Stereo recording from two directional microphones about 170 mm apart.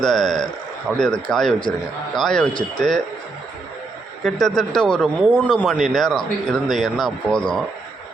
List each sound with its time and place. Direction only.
0.0 s speech: 5° left (ahead or behind)
4.2 s speech: centre (ahead or behind)